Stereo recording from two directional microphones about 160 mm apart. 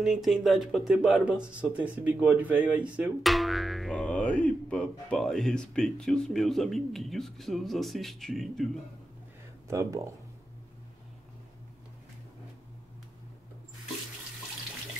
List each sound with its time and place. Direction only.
0.0 s speech: centre (ahead or behind)
9.7 s speech: 20° right (ahead or behind)